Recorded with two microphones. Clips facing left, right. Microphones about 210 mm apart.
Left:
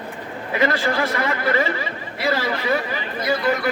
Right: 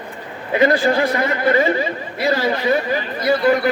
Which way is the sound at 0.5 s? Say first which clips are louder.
Right 6 dB; 30° right (ahead or behind).